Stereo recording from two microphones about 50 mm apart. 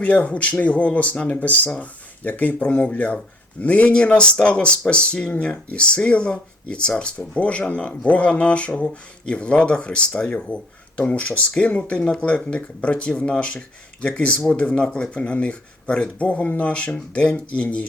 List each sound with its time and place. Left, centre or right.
0.0 s speech: left